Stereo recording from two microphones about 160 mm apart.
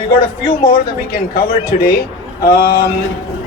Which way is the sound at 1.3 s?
70° left (ahead or behind).